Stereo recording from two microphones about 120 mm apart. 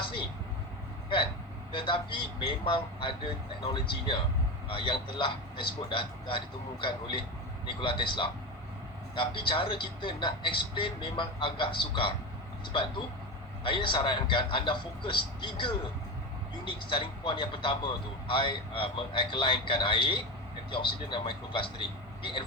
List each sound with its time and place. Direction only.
1.7 s speech: 45° left (ahead or behind)
13.7 s speech: 45° left (ahead or behind)